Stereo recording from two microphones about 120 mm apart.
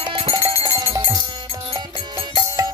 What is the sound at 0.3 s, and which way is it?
Music, 25° right (ahead or behind).